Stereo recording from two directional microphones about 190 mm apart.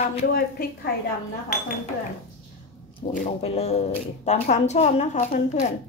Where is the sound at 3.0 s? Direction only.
40° left (ahead or behind).